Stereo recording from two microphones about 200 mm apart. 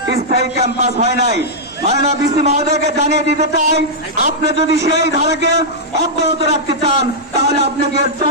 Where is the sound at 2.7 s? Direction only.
55° right (ahead or behind).